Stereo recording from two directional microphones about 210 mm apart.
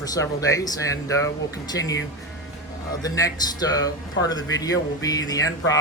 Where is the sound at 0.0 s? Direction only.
15° left (ahead or behind).